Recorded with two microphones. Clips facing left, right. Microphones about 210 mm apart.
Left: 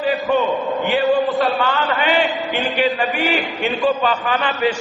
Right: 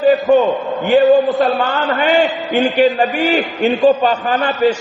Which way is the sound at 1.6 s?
45° right (ahead or behind).